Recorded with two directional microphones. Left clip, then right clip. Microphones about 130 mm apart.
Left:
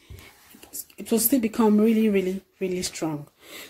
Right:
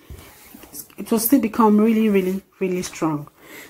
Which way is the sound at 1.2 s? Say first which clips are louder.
Right 6 dB; 30° left (ahead or behind).